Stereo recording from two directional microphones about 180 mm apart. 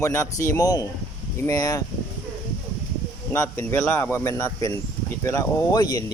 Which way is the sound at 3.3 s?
15° left (ahead or behind).